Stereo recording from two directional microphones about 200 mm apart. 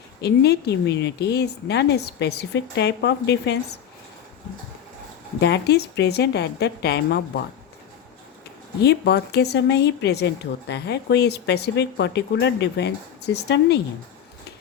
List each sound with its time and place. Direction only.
0.2 s a woman's voice: 55° left (ahead or behind)
5.4 s a woman's voice: 55° left (ahead or behind)
8.8 s a woman's voice: 55° left (ahead or behind)